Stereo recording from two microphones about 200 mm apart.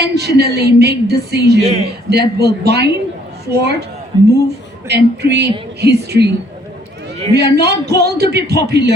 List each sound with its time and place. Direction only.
0.0 s a woman's voice: 55° right (ahead or behind)
1.6 s a man's voice: 35° right (ahead or behind)
2.0 s a woman's voice: 55° right (ahead or behind)
4.9 s a woman's voice: 55° right (ahead or behind)
7.3 s a woman's voice: 55° right (ahead or behind)